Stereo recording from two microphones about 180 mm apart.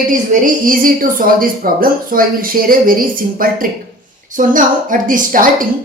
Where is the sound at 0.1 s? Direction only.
50° right (ahead or behind).